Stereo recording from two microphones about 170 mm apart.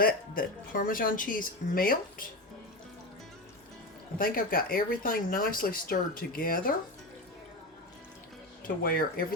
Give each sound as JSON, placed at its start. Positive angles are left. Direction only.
{"t": 0.0, "sound": "speech", "side_deg": 55}
{"t": 4.2, "sound": "speech", "side_deg": 55}
{"t": 8.6, "sound": "speech", "side_deg": 60}